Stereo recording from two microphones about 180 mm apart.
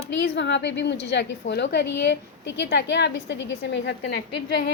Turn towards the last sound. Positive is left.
turn(degrees=75)  # may be behind; listen again after turning